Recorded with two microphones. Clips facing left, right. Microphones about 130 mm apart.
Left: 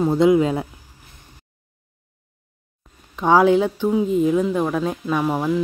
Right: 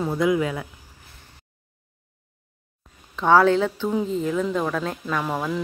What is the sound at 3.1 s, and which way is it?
Speech, 15° left (ahead or behind).